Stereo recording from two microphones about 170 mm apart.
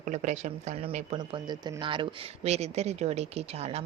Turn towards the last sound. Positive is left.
turn(degrees=-40)  # may be behind; listen again after turning